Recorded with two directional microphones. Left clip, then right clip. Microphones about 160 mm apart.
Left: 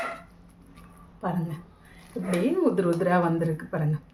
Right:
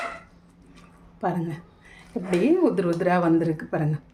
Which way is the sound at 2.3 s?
40° right (ahead or behind).